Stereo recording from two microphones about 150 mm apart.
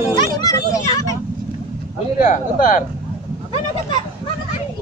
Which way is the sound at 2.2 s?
60° left (ahead or behind).